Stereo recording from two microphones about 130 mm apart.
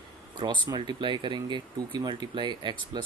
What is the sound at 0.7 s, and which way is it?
Speech, 35° right (ahead or behind).